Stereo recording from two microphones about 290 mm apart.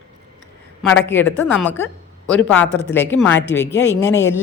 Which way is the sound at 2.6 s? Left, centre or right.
Left.